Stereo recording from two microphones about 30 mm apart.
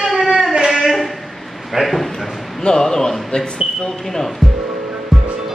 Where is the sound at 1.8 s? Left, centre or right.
Centre.